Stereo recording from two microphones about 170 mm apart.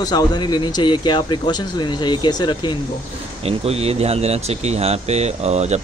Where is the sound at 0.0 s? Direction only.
25° left (ahead or behind).